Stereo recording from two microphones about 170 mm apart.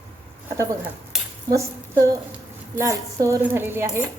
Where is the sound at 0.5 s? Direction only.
20° right (ahead or behind).